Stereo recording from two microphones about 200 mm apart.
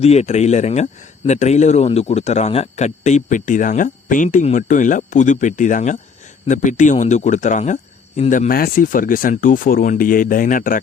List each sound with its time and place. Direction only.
0.0 s a man's voice: 30° left (ahead or behind)